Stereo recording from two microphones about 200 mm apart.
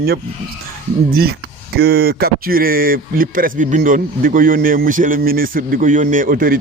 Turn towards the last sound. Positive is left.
turn(degrees=-45)  # may be behind; listen again after turning